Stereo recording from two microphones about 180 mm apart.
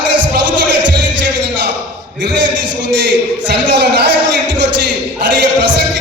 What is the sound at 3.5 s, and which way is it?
Music, 75° right (ahead or behind).